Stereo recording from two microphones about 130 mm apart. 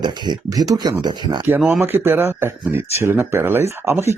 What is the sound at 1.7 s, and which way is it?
Speech, 15° right (ahead or behind).